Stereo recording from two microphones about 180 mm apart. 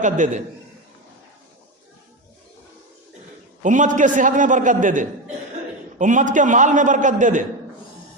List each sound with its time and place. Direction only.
0.0 s a man's voice: 45° right (ahead or behind)
3.6 s a man's voice: 45° right (ahead or behind)